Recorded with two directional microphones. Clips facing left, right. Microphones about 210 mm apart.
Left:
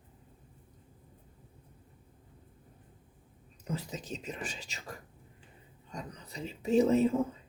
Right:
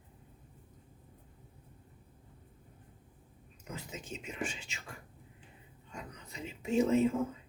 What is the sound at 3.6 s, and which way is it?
Speech, 35° left (ahead or behind).